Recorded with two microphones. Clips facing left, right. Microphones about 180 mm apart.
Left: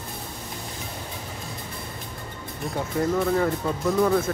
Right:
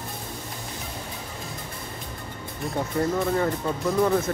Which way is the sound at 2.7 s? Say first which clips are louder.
Even; centre (ahead or behind).